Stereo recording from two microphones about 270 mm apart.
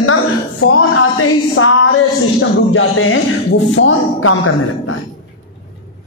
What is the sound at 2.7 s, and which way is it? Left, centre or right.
A man's voice, left.